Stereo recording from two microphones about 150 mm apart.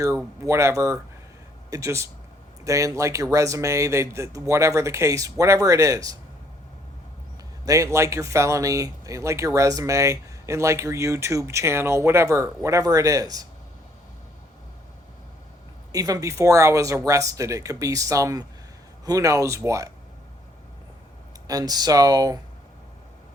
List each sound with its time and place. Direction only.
0.4 s speech: 20° right (ahead or behind)
7.6 s speech: 20° right (ahead or behind)
15.9 s speech: 25° right (ahead or behind)
21.4 s speech: 25° right (ahead or behind)